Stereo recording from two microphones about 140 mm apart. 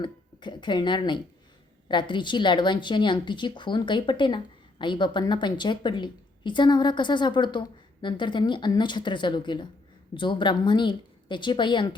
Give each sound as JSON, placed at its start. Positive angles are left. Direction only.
{"t": 0.0, "sound": "a woman's voice", "side_deg": 35}